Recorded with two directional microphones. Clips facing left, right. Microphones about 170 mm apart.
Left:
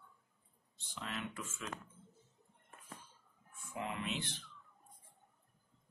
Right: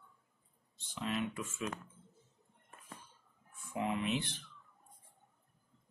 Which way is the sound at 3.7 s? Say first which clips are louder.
Right 6 dB; 20° right (ahead or behind).